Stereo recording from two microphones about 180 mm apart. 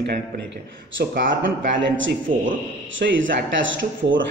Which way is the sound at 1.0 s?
60° right (ahead or behind).